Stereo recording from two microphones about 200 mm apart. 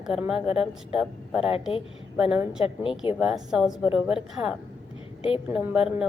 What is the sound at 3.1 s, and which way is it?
Speech, 5° right (ahead or behind).